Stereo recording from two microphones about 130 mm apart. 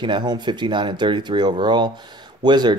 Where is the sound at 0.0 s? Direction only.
35° right (ahead or behind).